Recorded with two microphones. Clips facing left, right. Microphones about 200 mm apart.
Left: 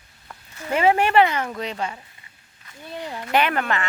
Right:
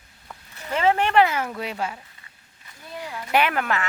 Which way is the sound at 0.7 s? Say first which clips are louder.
Left 2 dB; 10° left (ahead or behind).